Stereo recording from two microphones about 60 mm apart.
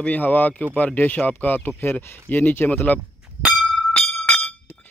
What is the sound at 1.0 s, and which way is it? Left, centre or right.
Speech, left.